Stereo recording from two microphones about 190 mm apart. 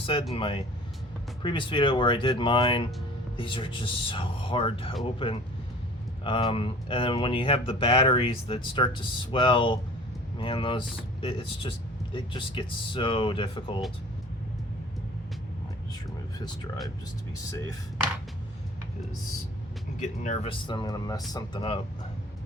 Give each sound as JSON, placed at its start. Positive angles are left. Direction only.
{"t": 0.0, "sound": "speech", "side_deg": 30}
{"t": 17.3, "sound": "speech", "side_deg": 15}
{"t": 20.0, "sound": "speech", "side_deg": 40}